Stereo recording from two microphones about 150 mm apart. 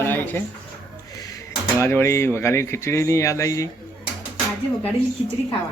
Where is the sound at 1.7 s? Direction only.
15° left (ahead or behind).